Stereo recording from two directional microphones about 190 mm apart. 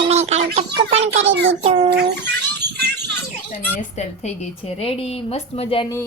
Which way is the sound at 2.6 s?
60° right (ahead or behind).